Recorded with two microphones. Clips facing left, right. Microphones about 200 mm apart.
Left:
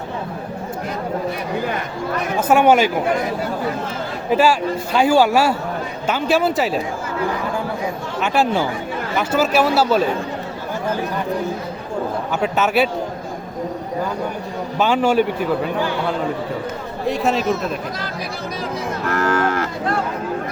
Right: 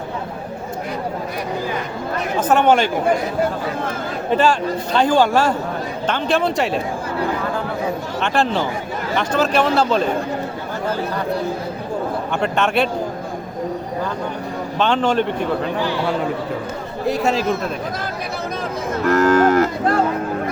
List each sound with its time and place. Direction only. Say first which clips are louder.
2.4 s speech: left 1 dB; 10° left (ahead or behind)
4.3 s speech: left 1 dB; 10° left (ahead or behind)
8.2 s speech: left 2 dB; 5° left (ahead or behind)
12.3 s speech: left 1 dB; 5° left (ahead or behind)
14.8 s speech: left 2 dB; 10° left (ahead or behind)
17.1 s speech: even; centre (ahead or behind)
19.1 s livestock: right 6 dB; 40° right (ahead or behind)